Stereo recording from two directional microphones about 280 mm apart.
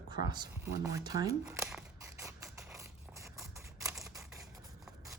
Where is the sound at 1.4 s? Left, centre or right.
Centre.